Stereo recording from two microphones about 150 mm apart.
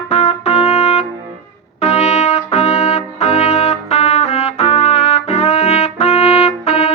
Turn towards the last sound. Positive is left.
turn(degrees=45)  # may be behind; listen again after turning